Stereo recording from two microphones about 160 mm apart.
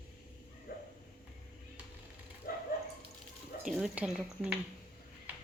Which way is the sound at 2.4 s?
65° left (ahead or behind).